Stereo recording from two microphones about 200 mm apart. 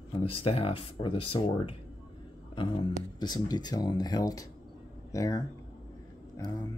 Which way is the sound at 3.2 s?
20° left (ahead or behind).